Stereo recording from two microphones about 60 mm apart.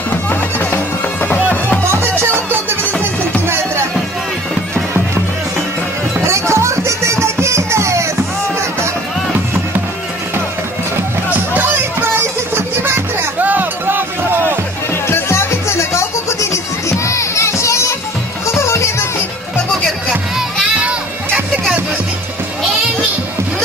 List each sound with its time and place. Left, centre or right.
0.1 s music: left
1.9 s music: right
6.2 s music: right
11.2 s music: right
13.4 s music: right
15.0 s music: left